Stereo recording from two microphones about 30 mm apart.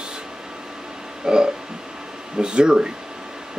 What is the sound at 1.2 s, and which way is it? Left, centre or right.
Speech, right.